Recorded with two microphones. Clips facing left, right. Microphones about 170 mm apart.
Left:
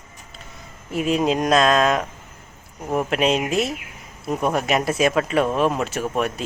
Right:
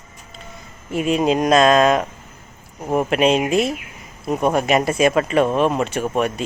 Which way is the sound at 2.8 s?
15° right (ahead or behind).